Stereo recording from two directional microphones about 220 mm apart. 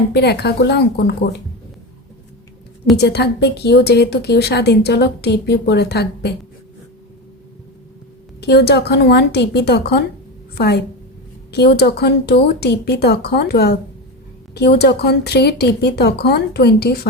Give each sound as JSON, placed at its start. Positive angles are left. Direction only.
{"t": 0.1, "sound": "a woman's voice", "side_deg": 50}
{"t": 2.9, "sound": "a woman's voice", "side_deg": 50}
{"t": 8.4, "sound": "a woman's voice", "side_deg": 50}